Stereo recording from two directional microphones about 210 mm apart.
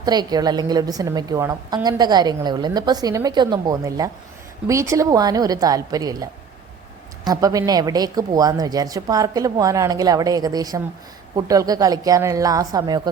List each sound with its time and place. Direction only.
0.0 s a woman's voice: 20° right (ahead or behind)
7.3 s speech: 15° right (ahead or behind)